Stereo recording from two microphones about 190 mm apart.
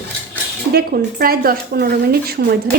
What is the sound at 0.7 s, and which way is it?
A woman's voice, 55° right (ahead or behind).